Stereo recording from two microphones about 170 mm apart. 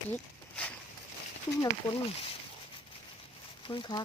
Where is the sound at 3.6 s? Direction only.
30° left (ahead or behind).